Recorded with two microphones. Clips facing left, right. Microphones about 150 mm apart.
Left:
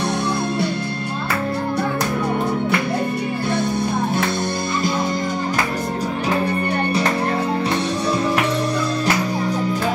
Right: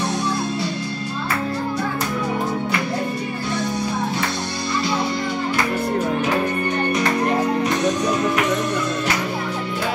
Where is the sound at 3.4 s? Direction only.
55° left (ahead or behind).